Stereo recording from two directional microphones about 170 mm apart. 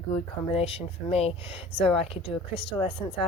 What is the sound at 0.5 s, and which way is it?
Speech, 35° left (ahead or behind).